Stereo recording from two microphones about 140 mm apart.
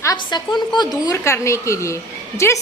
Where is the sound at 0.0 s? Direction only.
25° left (ahead or behind).